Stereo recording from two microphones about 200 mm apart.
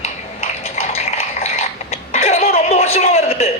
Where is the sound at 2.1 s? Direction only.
35° left (ahead or behind).